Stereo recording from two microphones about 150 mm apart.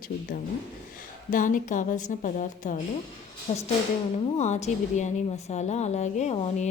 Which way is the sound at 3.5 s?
40° left (ahead or behind).